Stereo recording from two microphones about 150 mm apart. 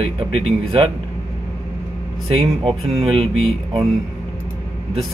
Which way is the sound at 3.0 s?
40° right (ahead or behind).